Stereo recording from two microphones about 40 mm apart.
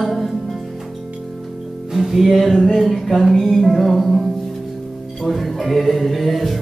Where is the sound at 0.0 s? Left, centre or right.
Centre.